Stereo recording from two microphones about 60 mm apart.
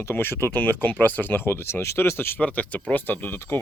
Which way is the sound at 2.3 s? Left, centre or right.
Left.